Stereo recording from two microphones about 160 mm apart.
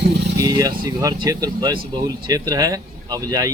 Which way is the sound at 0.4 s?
25° right (ahead or behind).